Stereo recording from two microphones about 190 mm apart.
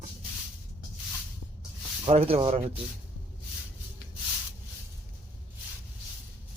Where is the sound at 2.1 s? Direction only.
30° right (ahead or behind).